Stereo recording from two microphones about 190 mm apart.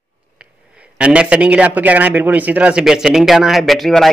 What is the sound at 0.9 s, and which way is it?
A man's voice, 5° right (ahead or behind).